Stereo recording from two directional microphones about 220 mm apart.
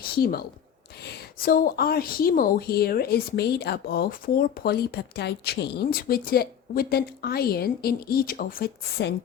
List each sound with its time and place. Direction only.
0.1 s a woman's voice: 45° left (ahead or behind)